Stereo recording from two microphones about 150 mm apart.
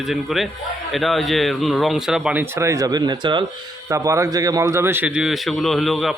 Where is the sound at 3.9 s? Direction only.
20° right (ahead or behind); by 6.1 s centre (ahead or behind).